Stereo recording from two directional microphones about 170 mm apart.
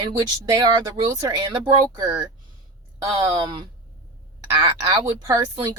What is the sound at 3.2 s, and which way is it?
Speech, 25° right (ahead or behind).